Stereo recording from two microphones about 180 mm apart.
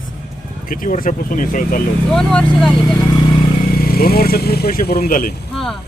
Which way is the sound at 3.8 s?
55° left (ahead or behind).